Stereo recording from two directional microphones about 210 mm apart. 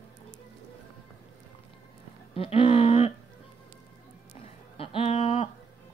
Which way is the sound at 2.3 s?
25° left (ahead or behind).